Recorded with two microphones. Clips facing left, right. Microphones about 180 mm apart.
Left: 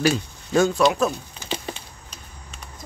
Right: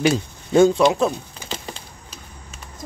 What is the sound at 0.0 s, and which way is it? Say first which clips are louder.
Speech: right 2 dB; 20° right (ahead or behind).